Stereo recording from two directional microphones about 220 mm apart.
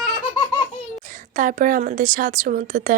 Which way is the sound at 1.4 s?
35° right (ahead or behind).